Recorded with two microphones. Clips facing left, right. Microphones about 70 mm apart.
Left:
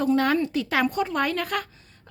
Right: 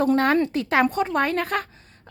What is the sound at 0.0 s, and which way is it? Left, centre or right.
A woman's voice, right.